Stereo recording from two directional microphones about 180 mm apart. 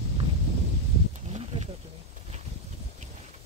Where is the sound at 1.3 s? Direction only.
35° right (ahead or behind).